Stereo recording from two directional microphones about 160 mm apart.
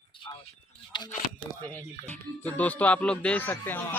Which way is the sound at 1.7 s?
10° left (ahead or behind).